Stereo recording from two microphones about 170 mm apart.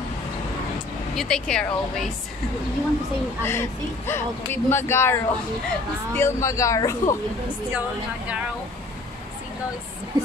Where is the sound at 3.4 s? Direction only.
15° left (ahead or behind).